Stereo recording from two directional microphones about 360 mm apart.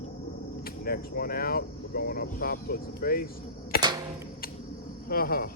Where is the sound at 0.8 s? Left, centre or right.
Left.